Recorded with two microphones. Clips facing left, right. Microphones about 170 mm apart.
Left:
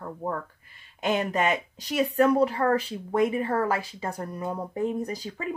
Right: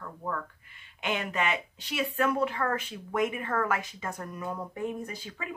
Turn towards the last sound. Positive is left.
turn(degrees=35)  # may be behind; listen again after turning